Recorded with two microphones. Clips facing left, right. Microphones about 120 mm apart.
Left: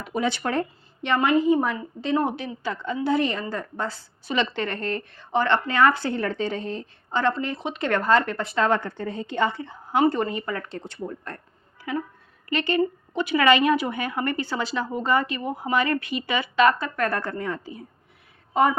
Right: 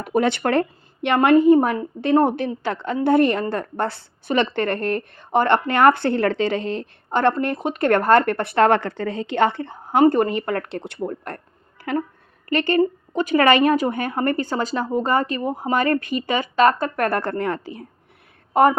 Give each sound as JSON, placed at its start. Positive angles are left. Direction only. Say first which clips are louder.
{"t": 0.0, "sound": "a woman's voice", "louder": "right 6 dB", "side_deg": -60}
{"t": 12.5, "sound": "a woman's voice", "louder": "right 5 dB", "side_deg": -50}
{"t": 18.5, "sound": "speech", "louder": "right 5 dB", "side_deg": -55}